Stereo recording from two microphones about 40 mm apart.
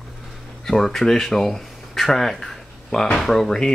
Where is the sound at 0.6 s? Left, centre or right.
Centre.